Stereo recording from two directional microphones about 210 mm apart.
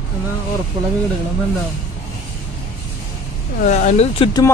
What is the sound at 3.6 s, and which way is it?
Speech, 35° left (ahead or behind).